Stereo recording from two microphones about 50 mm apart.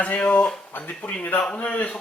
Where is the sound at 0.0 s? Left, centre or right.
Left.